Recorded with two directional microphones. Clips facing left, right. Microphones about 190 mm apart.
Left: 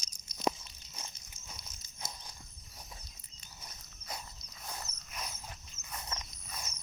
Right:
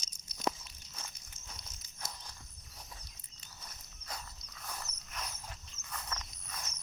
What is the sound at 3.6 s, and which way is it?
Walk, 15° left (ahead or behind).